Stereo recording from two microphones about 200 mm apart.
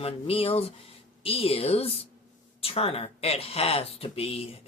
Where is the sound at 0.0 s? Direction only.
30° left (ahead or behind).